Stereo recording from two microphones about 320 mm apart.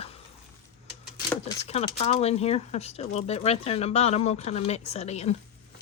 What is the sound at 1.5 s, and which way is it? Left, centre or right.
Speech, centre.